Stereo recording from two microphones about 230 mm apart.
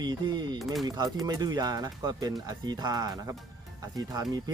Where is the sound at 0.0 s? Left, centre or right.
Centre.